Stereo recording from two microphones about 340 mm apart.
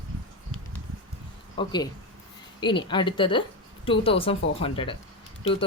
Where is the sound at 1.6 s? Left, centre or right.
Centre.